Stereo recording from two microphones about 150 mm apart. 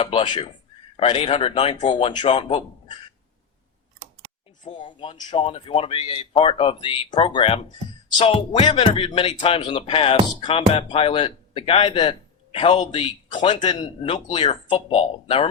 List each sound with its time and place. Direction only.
0.0 s speech: 35° left (ahead or behind)
4.6 s speech: 30° left (ahead or behind)